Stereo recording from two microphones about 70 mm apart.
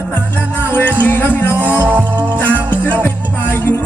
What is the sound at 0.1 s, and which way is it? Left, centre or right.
Music, left.